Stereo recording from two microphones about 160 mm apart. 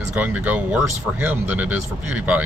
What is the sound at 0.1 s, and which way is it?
Speech, 10° right (ahead or behind).